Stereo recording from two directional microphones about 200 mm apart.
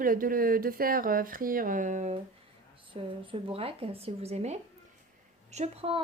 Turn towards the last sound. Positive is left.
turn(degrees=-30)  # may be behind; listen again after turning